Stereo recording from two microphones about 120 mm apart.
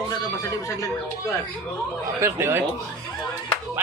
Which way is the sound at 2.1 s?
20° right (ahead or behind).